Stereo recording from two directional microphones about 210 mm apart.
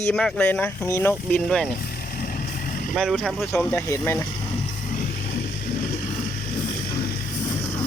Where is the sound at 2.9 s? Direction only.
Centre (ahead or behind).